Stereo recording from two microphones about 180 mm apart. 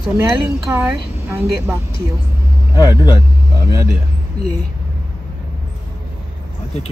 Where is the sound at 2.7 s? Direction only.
20° left (ahead or behind).